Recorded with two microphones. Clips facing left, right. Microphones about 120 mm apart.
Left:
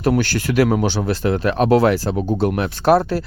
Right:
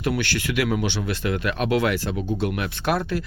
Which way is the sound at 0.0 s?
40° left (ahead or behind).